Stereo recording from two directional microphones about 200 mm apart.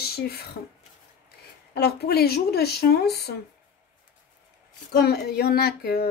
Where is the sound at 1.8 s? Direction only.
55° left (ahead or behind).